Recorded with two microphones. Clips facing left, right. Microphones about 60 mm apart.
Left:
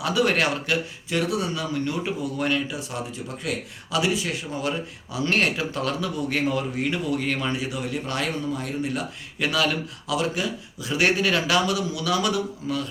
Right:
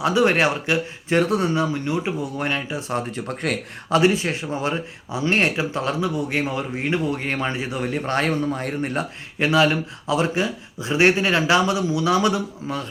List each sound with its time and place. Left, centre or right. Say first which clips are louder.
0.0 s a man's voice: right 4 dB; right
1.1 s speech: right 6 dB; right
3.2 s speech: right 5 dB; right
3.9 s a man's voice: right 6 dB; right